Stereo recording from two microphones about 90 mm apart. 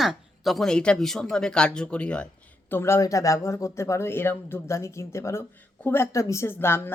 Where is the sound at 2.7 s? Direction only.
30° left (ahead or behind).